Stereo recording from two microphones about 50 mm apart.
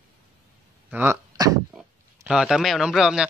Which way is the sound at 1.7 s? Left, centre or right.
Centre.